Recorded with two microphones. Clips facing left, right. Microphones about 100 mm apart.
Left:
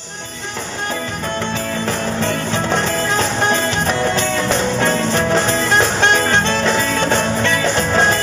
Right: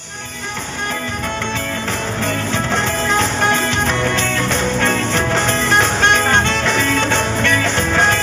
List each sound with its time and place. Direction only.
4.7 s music: 20° left (ahead or behind)
6.4 s music: 25° left (ahead or behind)